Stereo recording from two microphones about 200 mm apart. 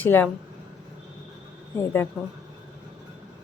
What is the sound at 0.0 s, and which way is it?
Speech, 10° left (ahead or behind).